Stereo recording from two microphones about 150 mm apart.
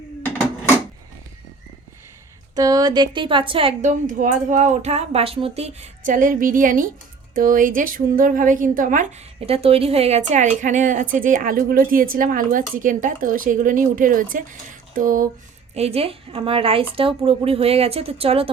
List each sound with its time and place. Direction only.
2.6 s a woman's voice: 25° right (ahead or behind)
3.8 s a woman's voice: 55° right (ahead or behind)
15.7 s a woman's voice: 45° right (ahead or behind)